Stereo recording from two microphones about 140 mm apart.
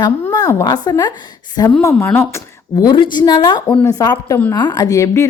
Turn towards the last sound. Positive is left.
turn(degrees=20)  # may be behind; listen again after turning